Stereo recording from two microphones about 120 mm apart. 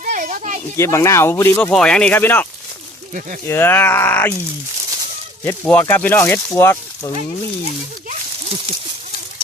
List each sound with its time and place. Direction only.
0.0 s a sound: 90° right
0.8 s speech: 25° left (ahead or behind)
1.7 s speech: 5° left (ahead or behind)
5.5 s speech: 15° left (ahead or behind)
8.4 s speech: 55° right (ahead or behind)